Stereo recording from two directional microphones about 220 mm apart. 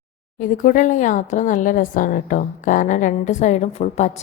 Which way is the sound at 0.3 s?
35° left (ahead or behind).